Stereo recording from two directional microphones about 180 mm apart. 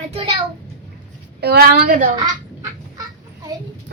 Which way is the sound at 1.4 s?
60° right (ahead or behind).